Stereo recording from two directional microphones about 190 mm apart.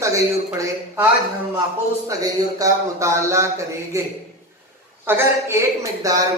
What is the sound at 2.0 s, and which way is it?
Speech, 15° right (ahead or behind).